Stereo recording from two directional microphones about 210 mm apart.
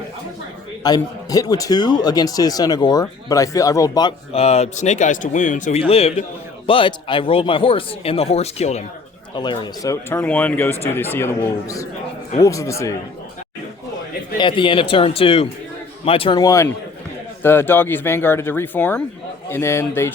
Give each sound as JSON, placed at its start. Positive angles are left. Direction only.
{"t": 0.8, "sound": "speech", "side_deg": 20}
{"t": 14.3, "sound": "speech", "side_deg": 25}